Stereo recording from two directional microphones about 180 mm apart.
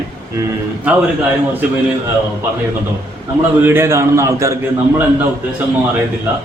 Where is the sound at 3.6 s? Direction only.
10° right (ahead or behind).